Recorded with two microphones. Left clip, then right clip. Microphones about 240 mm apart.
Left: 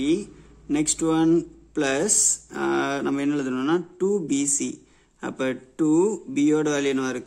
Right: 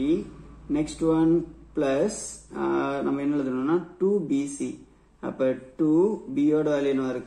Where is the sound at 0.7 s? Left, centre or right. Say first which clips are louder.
Left 1 dB; left.